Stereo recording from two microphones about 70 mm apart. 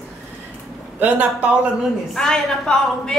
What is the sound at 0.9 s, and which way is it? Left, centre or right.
Speech, right.